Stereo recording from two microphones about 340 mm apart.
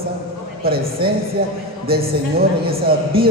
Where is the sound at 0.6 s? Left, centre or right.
Right.